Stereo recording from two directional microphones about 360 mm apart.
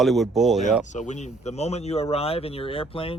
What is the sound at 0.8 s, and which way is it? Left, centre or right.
Speech, centre.